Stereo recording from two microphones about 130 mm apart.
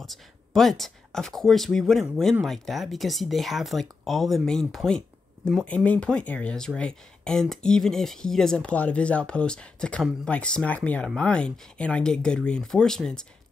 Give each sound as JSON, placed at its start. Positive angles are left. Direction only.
{"t": 0.0, "sound": "speech", "side_deg": 0}